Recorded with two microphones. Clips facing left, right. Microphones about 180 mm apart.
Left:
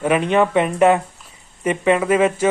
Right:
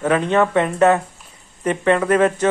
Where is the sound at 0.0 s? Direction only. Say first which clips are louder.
Even; 15° left (ahead or behind).